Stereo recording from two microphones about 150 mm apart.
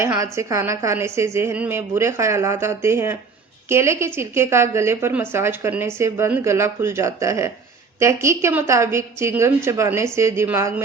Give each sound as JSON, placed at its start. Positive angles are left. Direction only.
{"t": 0.0, "sound": "a woman's voice", "side_deg": -20}